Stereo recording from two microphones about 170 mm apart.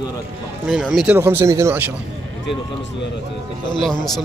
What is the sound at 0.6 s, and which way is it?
Speech, centre (ahead or behind).